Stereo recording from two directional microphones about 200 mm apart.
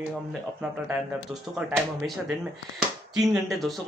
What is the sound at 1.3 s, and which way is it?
Speech, 5° right (ahead or behind).